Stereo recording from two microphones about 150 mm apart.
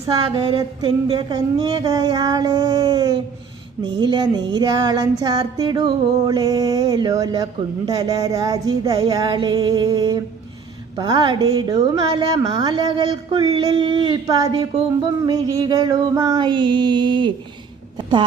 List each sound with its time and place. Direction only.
0.3 s speech: 30° right (ahead or behind)
15.3 s music: 25° right (ahead or behind)